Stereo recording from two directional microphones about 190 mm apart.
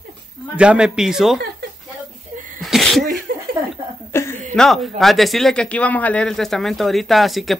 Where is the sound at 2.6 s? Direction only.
Centre (ahead or behind).